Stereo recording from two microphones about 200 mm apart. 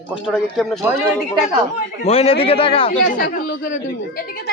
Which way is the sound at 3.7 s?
45° left (ahead or behind).